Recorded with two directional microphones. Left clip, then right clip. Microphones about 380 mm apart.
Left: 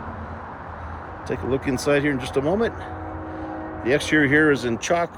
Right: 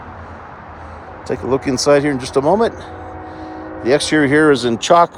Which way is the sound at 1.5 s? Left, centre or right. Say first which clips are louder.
Right 8 dB; right.